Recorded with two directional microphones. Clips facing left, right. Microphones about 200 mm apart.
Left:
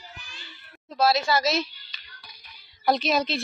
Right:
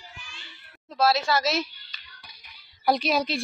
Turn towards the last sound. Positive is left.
turn(degrees=-10)  # may be behind; listen again after turning